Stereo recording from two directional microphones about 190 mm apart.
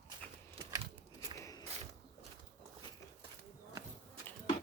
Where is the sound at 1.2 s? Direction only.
15° left (ahead or behind).